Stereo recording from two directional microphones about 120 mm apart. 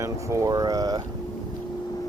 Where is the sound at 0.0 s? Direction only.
25° right (ahead or behind).